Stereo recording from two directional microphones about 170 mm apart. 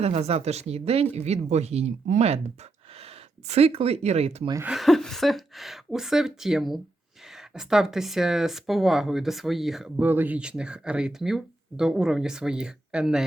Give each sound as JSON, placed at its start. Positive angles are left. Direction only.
{"t": 0.0, "sound": "speech", "side_deg": -40}
{"t": 4.6, "sound": "speech", "side_deg": 0}